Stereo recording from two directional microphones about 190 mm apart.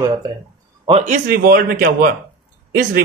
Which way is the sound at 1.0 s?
45° right (ahead or behind).